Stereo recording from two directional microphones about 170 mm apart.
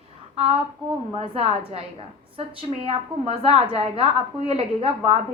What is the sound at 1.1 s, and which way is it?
A woman's voice, 35° right (ahead or behind).